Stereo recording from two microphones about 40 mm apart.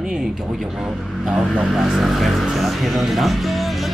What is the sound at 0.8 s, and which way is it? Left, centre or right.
Speech, centre.